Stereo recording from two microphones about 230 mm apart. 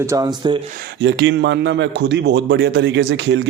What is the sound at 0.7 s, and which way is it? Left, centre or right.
A man's voice, right.